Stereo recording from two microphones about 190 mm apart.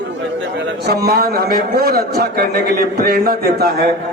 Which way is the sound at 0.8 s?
55° right (ahead or behind).